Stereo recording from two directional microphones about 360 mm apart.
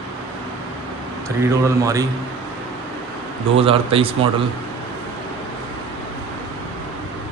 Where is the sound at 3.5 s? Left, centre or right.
Centre.